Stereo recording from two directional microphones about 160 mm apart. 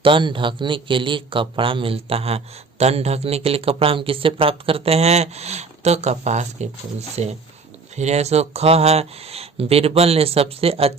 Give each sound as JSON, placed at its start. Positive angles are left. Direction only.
{"t": 0.0, "sound": "a man's voice", "side_deg": -30}